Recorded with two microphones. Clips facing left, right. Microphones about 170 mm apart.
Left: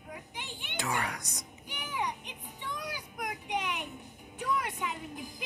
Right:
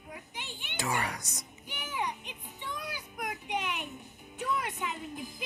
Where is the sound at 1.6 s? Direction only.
15° left (ahead or behind).